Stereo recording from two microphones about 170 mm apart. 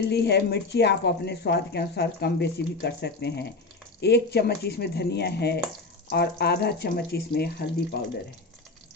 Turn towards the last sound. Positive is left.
turn(degrees=70)  # may be behind; listen again after turning